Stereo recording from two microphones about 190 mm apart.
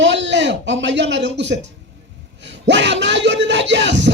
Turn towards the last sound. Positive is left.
turn(degrees=-70)  # may be behind; listen again after turning